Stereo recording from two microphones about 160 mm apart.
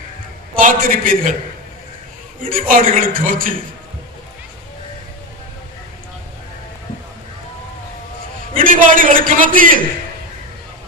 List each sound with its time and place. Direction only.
0.5 s a man's voice: 60° right (ahead or behind)
2.4 s a man's voice: 60° right (ahead or behind)
8.6 s a man's voice: 55° right (ahead or behind)